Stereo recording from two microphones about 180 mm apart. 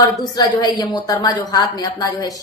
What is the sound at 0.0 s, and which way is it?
A woman's voice, 20° left (ahead or behind).